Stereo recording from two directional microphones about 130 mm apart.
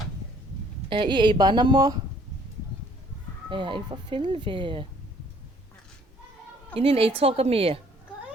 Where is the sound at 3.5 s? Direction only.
40° right (ahead or behind).